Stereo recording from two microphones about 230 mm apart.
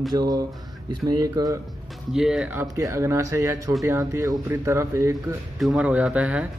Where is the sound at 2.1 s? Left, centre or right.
Centre.